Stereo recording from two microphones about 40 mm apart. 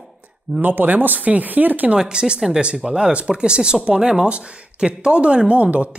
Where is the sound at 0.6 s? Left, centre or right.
Right.